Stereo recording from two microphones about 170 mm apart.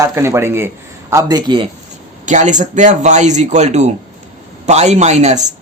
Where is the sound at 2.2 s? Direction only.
45° right (ahead or behind).